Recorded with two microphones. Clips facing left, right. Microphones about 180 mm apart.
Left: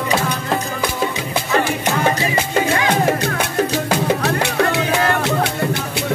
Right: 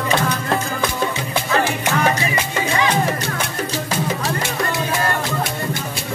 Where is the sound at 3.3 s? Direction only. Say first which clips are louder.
Left 5 dB; 65° left (ahead or behind).